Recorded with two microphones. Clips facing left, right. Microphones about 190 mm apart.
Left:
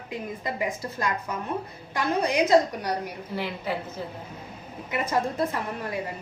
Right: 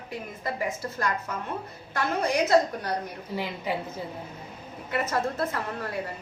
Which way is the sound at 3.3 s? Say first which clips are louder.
Even; 15° right (ahead or behind).